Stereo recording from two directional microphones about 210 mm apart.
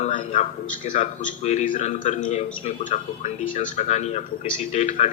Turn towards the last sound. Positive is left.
turn(degrees=35)  # may be behind; listen again after turning